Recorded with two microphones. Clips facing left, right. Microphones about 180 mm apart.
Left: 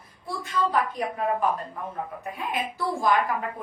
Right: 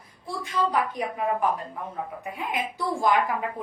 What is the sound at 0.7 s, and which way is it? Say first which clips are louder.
A woman's voice: even; 15° right (ahead or behind).